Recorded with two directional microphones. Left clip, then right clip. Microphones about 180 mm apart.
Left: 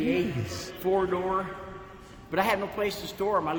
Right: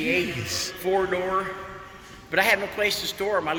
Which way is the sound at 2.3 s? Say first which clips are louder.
Right 5 dB; 75° left (ahead or behind).